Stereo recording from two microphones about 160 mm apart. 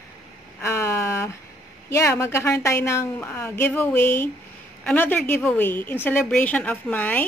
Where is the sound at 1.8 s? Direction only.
15° left (ahead or behind).